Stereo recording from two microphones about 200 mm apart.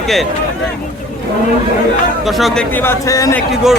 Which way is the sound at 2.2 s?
Centre (ahead or behind).